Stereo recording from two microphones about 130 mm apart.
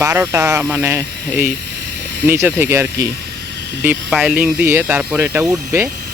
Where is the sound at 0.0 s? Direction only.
20° right (ahead or behind).